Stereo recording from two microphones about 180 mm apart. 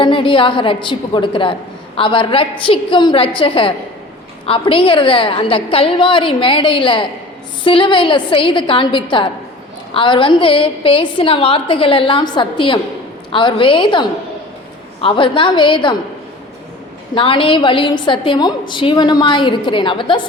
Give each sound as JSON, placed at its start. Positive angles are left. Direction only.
{"t": 0.0, "sound": "a woman's voice", "side_deg": 30}
{"t": 17.2, "sound": "a woman's voice", "side_deg": 30}